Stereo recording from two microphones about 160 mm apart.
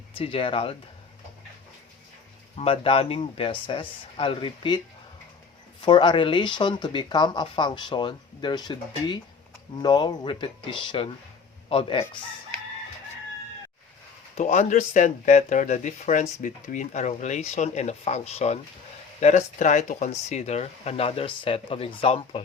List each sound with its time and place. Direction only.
0.2 s speech: 35° left (ahead or behind)
2.6 s speech: 35° left (ahead or behind)
5.8 s speech: 30° left (ahead or behind)
14.3 s speech: 45° left (ahead or behind)